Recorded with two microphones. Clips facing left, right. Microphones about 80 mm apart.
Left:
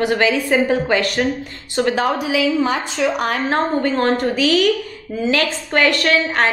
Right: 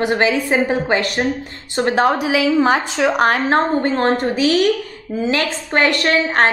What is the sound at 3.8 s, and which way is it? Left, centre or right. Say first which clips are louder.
Speech: right 1 dB; right.